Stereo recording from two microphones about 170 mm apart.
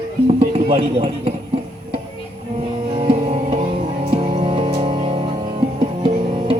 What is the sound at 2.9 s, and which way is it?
Music, 35° right (ahead or behind).